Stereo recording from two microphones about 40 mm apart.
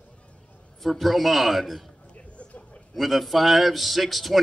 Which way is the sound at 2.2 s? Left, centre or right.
Left.